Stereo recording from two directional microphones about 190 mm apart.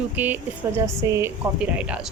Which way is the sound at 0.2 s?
10° right (ahead or behind).